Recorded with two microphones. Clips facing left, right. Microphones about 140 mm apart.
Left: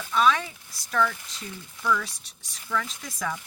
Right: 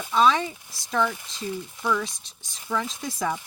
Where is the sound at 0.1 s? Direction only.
30° right (ahead or behind).